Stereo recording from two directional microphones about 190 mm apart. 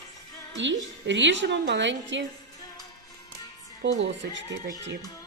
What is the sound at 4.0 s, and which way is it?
Speech, 70° right (ahead or behind).